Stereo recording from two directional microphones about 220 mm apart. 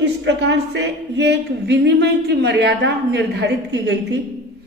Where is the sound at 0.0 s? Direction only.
50° right (ahead or behind).